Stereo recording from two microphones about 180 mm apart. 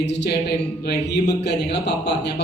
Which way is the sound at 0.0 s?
70° left (ahead or behind).